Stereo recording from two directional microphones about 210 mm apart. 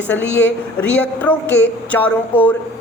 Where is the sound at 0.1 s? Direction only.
10° left (ahead or behind).